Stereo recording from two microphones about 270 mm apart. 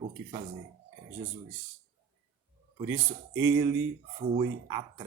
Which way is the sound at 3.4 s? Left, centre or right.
Centre.